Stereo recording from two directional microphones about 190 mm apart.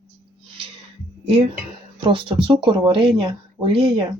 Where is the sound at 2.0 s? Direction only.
25° right (ahead or behind).